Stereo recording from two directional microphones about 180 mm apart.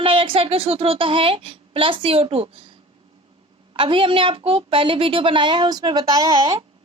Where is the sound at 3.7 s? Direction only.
30° right (ahead or behind).